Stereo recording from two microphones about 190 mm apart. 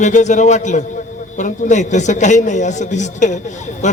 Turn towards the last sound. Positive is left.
turn(degrees=40)  # may be behind; listen again after turning